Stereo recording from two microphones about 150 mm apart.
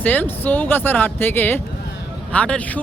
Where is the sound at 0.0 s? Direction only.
10° left (ahead or behind).